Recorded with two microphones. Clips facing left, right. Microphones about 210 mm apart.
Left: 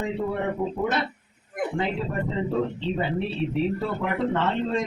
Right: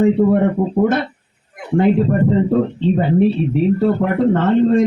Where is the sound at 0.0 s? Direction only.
55° right (ahead or behind).